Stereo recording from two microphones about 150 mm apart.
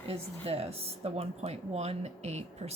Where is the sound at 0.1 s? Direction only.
40° right (ahead or behind).